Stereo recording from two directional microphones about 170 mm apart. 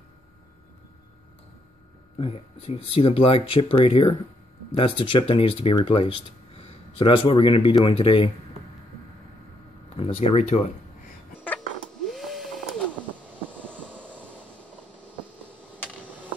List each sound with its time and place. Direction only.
2.1 s speech: 35° left (ahead or behind)
9.9 s speech: 40° left (ahead or behind)
12.1 s a sound: centre (ahead or behind)
13.5 s vehicle: 10° right (ahead or behind)